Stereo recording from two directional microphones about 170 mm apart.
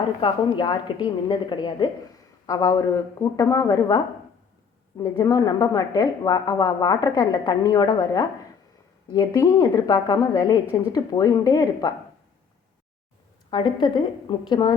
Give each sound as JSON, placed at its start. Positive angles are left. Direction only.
{"t": 0.2, "sound": "a woman's voice", "side_deg": 30}
{"t": 13.5, "sound": "a woman's voice", "side_deg": 25}